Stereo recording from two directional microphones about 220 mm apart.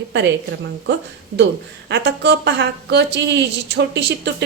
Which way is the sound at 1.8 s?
50° right (ahead or behind).